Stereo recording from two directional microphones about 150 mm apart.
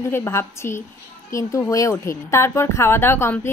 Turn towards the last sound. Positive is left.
turn(degrees=15)  # may be behind; listen again after turning